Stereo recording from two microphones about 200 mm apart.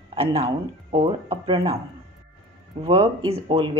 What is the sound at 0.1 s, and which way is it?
Speech, 30° right (ahead or behind).